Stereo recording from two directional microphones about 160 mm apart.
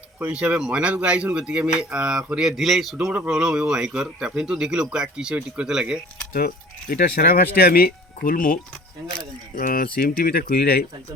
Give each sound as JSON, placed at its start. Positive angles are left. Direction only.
{"t": 0.2, "sound": "speech", "side_deg": -10}
{"t": 6.9, "sound": "speech", "side_deg": 70}
{"t": 9.6, "sound": "speech", "side_deg": 65}